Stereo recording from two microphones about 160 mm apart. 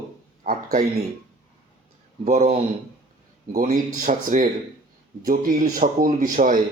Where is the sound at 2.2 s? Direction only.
50° right (ahead or behind).